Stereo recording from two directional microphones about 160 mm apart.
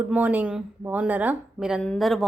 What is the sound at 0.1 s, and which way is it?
Speech, 10° right (ahead or behind).